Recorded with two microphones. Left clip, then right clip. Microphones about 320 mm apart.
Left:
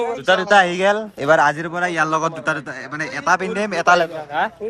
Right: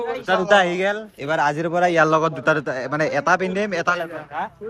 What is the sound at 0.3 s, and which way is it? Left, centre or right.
A man's voice, centre.